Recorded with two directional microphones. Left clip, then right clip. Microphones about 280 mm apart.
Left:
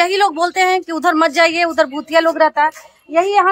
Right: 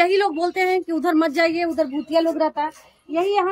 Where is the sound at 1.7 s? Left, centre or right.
Left.